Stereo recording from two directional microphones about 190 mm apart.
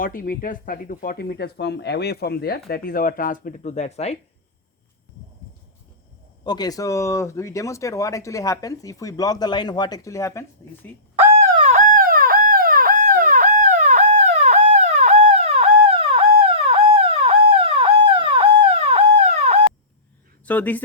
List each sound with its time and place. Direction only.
0.0 s speech: 45° left (ahead or behind)
6.4 s speech: 20° left (ahead or behind)
11.6 s howl: 40° right (ahead or behind)
20.4 s speech: 10° left (ahead or behind)